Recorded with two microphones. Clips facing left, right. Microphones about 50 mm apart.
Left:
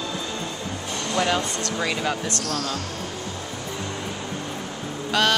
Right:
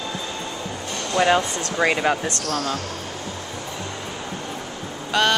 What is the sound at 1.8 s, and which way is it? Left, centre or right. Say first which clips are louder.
Speech: right 7 dB; right.